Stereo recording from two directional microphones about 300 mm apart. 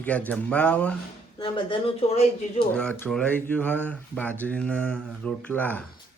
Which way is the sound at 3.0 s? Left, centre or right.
Centre.